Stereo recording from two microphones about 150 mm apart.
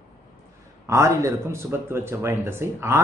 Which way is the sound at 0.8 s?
20° right (ahead or behind).